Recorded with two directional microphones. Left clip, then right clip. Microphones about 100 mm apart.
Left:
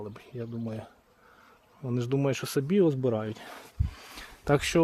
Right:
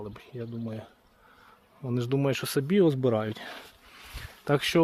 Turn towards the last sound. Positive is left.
turn(degrees=25)  # may be behind; listen again after turning